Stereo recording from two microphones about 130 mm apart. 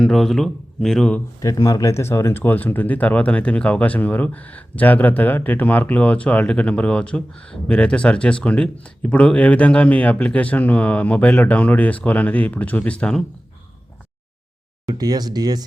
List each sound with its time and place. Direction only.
0.0 s speech: 5° left (ahead or behind)
1.4 s speech: 25° left (ahead or behind); by 13.2 s 10° left (ahead or behind)
14.8 s speech: 30° right (ahead or behind)